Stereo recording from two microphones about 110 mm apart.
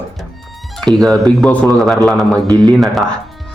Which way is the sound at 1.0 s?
Centre (ahead or behind).